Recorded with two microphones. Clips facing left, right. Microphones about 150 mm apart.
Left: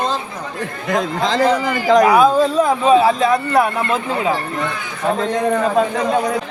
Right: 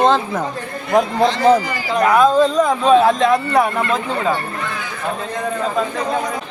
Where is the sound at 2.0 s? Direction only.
10° left (ahead or behind).